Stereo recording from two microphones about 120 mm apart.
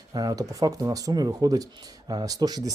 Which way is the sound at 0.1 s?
30° right (ahead or behind).